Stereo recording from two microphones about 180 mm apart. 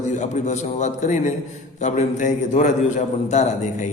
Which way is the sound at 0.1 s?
40° left (ahead or behind).